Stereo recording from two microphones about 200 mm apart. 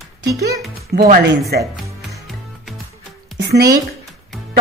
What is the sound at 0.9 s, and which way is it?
Speech, 40° right (ahead or behind).